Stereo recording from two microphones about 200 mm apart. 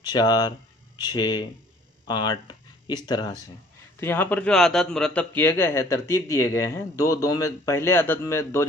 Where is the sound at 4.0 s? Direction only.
10° left (ahead or behind).